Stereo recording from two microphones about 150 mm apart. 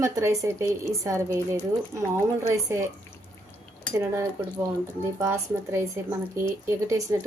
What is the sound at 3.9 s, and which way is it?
A woman's voice, 20° right (ahead or behind).